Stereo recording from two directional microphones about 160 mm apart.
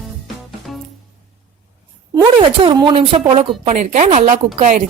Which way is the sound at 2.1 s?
30° right (ahead or behind).